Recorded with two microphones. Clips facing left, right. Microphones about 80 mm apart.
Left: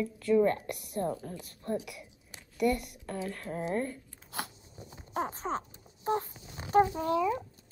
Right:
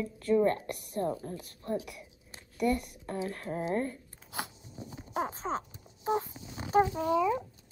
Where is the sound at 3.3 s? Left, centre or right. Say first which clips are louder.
Even; right.